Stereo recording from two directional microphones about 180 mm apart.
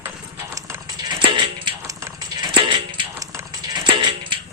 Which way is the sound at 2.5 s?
30° right (ahead or behind).